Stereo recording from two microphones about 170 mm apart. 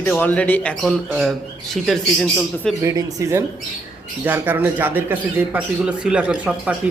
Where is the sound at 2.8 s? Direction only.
20° right (ahead or behind).